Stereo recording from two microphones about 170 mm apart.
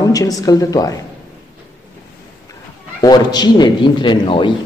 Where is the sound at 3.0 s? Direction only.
25° left (ahead or behind).